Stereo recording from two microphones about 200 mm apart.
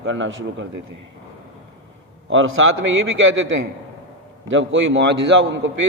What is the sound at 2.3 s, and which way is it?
A man's voice, 80° right.